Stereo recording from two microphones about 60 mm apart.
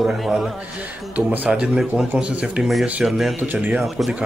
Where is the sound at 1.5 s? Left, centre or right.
Centre.